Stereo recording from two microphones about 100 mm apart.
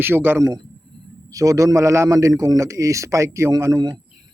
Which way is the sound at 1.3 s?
35° right (ahead or behind).